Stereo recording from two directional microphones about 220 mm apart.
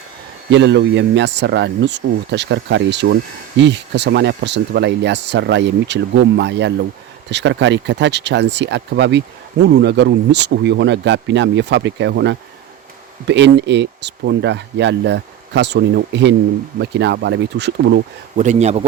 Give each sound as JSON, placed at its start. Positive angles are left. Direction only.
{"t": 0.5, "sound": "speech", "side_deg": -50}
{"t": 18.3, "sound": "a man's voice", "side_deg": -30}